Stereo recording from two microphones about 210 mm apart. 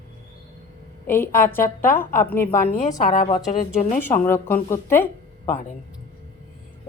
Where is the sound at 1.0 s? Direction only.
10° left (ahead or behind).